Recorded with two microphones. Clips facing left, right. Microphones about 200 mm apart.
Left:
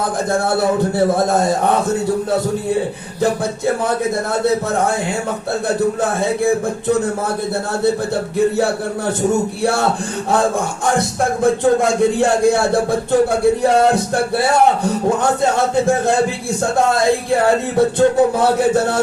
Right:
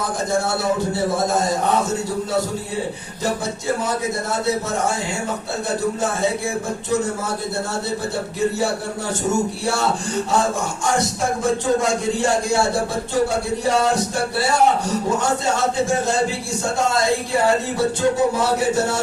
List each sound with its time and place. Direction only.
0.3 s speech: 55° left (ahead or behind)
5.6 s speech: 55° left (ahead or behind)
8.5 s speech: 55° left (ahead or behind)
10.8 s speech: 55° left (ahead or behind)